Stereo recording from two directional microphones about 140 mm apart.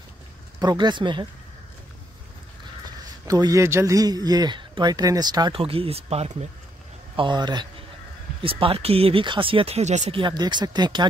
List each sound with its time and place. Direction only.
0.6 s speech: 30° right (ahead or behind)
3.3 s speech: 25° right (ahead or behind)
5.6 s speech: 40° right (ahead or behind)
7.2 s speech: 35° right (ahead or behind); by 10.1 s 55° right (ahead or behind)
10.1 s speech: 35° right (ahead or behind)